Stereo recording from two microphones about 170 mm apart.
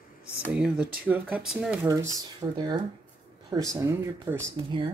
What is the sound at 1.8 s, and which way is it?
Speech, 20° right (ahead or behind).